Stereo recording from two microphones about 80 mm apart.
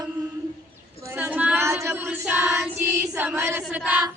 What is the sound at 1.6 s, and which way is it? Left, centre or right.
Speech, right.